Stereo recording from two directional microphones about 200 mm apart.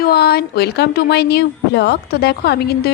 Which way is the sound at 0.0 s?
50° left (ahead or behind).